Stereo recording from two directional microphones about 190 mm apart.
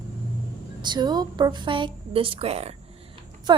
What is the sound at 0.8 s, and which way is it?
A woman's voice, 25° right (ahead or behind).